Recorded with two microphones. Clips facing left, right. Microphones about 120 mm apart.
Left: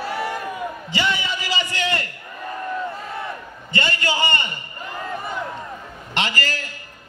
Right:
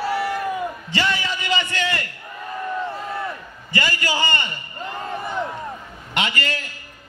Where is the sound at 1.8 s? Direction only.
25° left (ahead or behind).